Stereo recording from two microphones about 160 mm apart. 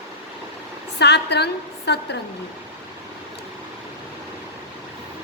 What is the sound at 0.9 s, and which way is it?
A woman's voice, 90° left.